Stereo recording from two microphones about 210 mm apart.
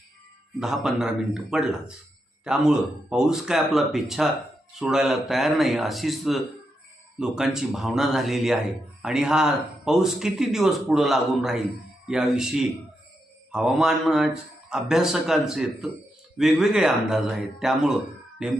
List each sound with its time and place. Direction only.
0.6 s speech: centre (ahead or behind)